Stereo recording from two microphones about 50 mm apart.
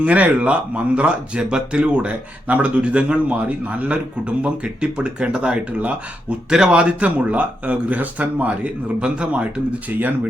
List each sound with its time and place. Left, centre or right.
0.0 s speech: right; by 6.7 s centre
6.7 s speech: right
9.9 s speech: right